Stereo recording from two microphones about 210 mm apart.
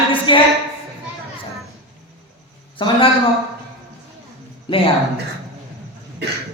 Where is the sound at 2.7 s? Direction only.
25° left (ahead or behind).